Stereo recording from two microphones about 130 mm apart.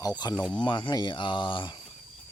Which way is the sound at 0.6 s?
35° left (ahead or behind).